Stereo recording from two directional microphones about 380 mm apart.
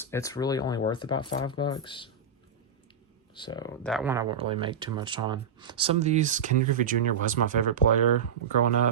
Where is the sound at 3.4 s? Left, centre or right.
Centre.